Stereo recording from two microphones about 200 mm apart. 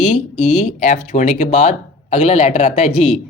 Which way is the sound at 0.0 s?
35° left (ahead or behind).